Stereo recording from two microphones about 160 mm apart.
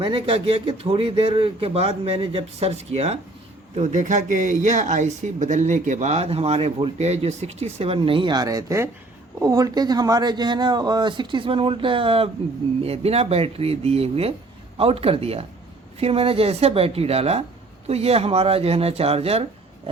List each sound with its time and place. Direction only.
0.0 s speech: 35° right (ahead or behind)